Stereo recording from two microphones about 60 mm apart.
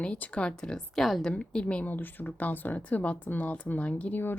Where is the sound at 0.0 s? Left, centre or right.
Centre.